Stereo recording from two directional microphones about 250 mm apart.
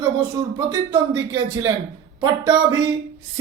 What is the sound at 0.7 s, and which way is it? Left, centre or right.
A man's voice, centre.